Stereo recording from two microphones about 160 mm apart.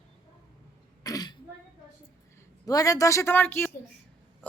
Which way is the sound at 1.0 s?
25° left (ahead or behind).